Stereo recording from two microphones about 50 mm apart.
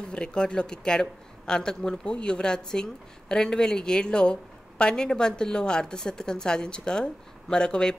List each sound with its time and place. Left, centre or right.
0.1 s speech: centre